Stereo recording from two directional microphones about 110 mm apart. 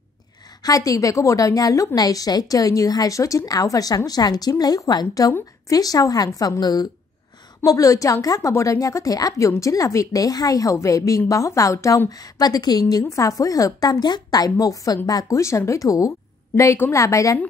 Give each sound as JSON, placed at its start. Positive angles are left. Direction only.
{"t": 0.6, "sound": "a woman's voice", "side_deg": 35}